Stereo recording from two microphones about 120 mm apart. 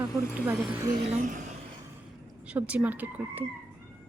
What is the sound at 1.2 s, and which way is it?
Speech, 90° right.